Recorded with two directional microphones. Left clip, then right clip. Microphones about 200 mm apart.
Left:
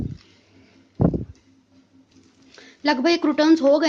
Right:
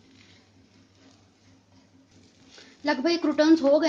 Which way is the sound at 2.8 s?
40° left (ahead or behind).